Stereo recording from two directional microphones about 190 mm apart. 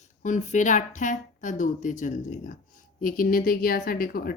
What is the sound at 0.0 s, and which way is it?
Speech, 40° left (ahead or behind).